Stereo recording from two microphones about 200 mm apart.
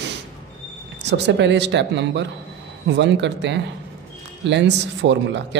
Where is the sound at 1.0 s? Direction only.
60° right (ahead or behind).